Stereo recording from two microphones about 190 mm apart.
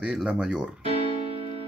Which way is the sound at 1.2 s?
30° right (ahead or behind).